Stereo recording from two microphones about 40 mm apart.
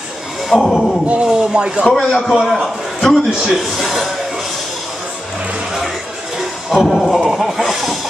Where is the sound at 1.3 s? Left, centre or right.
Centre.